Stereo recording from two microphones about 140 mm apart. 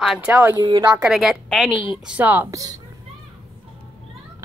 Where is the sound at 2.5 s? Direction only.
25° right (ahead or behind).